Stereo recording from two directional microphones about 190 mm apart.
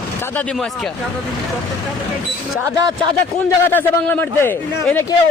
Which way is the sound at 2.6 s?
20° right (ahead or behind).